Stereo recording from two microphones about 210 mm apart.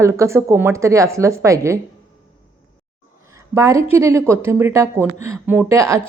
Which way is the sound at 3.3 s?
15° right (ahead or behind).